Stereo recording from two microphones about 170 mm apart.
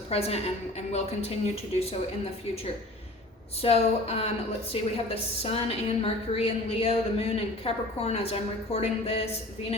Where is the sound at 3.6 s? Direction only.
35° left (ahead or behind).